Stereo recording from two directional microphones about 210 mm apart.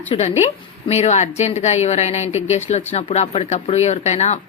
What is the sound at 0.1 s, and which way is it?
A woman's voice, 30° left (ahead or behind).